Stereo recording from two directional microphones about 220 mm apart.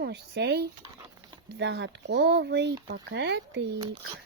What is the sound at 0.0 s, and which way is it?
Speech, 50° right (ahead or behind).